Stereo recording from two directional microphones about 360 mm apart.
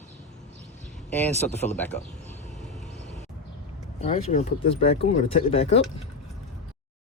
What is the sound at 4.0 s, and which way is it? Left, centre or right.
Speech, centre.